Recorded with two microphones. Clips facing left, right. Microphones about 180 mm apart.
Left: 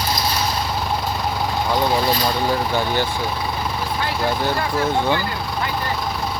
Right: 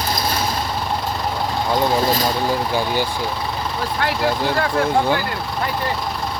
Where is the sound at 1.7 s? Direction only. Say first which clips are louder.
Right 2 dB; 15° right (ahead or behind).